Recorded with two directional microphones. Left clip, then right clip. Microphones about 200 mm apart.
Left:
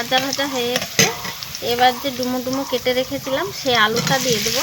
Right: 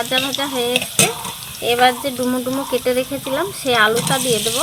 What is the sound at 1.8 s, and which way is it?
Speech, 35° right (ahead or behind).